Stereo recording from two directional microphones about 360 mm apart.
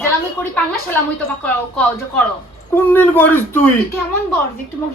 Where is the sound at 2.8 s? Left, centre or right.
Centre.